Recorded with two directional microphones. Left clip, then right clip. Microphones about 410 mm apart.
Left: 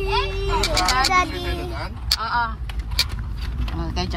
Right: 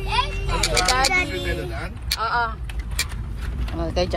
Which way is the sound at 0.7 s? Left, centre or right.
Left.